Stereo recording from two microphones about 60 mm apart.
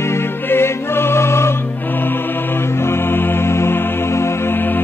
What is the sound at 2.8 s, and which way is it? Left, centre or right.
Music, left.